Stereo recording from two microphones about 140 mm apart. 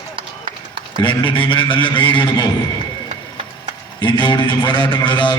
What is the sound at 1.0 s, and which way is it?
A man's voice, 35° left (ahead or behind).